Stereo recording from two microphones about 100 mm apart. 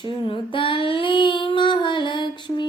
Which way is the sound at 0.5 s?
60° left (ahead or behind).